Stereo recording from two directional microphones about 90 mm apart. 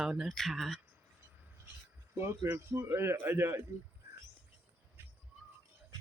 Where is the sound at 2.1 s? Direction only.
30° right (ahead or behind).